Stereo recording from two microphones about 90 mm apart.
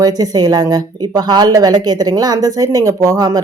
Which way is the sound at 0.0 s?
45° right (ahead or behind).